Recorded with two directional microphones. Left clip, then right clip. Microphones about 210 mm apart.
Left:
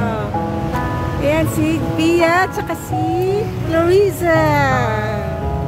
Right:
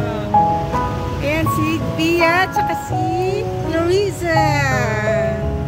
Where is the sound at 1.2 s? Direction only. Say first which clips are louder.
Left 2 dB; 10° left (ahead or behind).